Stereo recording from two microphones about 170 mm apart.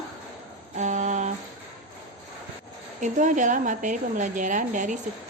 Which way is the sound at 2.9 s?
45° right (ahead or behind).